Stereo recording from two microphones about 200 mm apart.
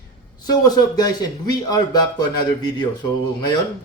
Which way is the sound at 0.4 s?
20° left (ahead or behind).